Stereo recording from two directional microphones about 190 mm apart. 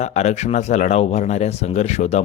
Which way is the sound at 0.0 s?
35° left (ahead or behind).